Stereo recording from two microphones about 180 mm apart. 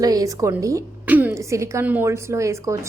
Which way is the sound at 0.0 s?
20° right (ahead or behind).